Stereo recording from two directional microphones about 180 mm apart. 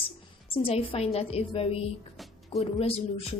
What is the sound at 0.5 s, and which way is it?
A woman's voice, 30° left (ahead or behind).